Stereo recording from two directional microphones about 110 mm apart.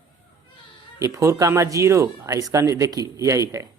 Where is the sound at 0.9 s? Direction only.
30° right (ahead or behind).